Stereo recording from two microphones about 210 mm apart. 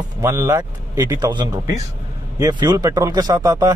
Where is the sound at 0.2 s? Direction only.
10° right (ahead or behind).